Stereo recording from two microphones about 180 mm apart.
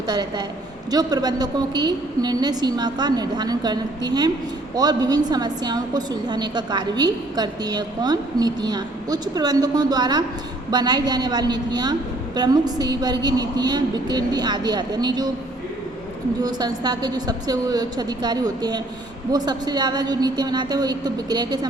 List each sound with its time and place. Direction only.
0.1 s a woman's voice: 25° right (ahead or behind)
16.4 s a woman's voice: 20° right (ahead or behind)